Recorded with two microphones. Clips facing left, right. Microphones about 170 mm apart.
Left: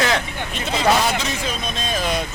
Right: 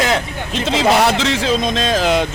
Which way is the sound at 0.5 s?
90° right.